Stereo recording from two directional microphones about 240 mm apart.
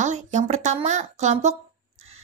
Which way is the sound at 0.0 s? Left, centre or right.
Right.